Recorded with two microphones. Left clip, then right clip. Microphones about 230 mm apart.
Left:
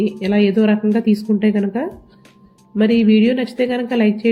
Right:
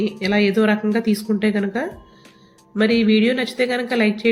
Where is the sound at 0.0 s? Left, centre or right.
Centre.